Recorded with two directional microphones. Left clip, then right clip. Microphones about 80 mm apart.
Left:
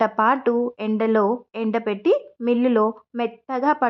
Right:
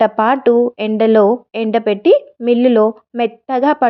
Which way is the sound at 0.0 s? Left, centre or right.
Right.